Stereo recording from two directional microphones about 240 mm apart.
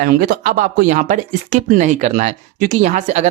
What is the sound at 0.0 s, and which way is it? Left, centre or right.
Speech, right.